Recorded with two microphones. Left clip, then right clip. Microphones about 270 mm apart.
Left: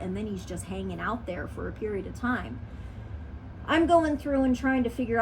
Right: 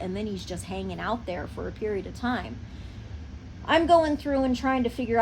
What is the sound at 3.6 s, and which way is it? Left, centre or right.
A woman's voice, right.